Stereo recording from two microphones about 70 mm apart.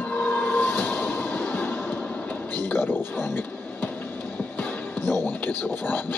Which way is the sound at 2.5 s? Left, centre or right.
Left.